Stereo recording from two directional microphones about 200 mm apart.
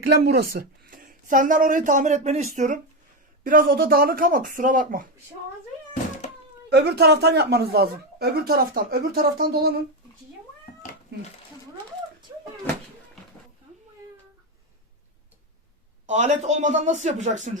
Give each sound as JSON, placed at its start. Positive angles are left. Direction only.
{"t": 0.1, "sound": "a woman's voice", "side_deg": -55}
{"t": 6.7, "sound": "a woman's voice", "side_deg": -55}
{"t": 16.0, "sound": "a woman's voice", "side_deg": -35}